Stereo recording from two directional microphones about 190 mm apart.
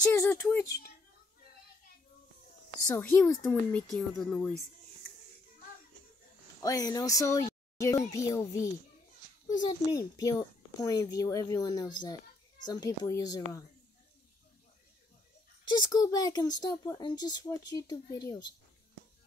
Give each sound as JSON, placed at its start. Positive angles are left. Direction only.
{"t": 0.1, "sound": "speech", "side_deg": 10}
{"t": 2.9, "sound": "speech", "side_deg": 10}
{"t": 6.6, "sound": "speech", "side_deg": 20}
{"t": 7.7, "sound": "a sound", "side_deg": 15}
{"t": 8.1, "sound": "speech", "side_deg": 15}
{"t": 15.7, "sound": "speech", "side_deg": 20}